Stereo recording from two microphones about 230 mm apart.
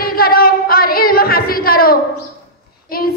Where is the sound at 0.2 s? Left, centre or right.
Left.